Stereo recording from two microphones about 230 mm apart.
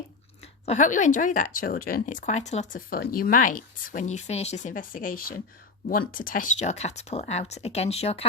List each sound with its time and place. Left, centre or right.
0.6 s speech: left